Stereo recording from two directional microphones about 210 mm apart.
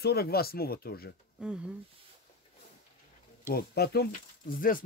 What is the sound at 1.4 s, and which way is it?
Speech, 5° right (ahead or behind).